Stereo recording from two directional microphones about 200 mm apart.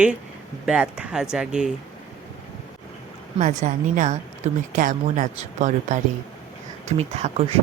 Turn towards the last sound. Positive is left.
turn(degrees=-30)  # may be behind; listen again after turning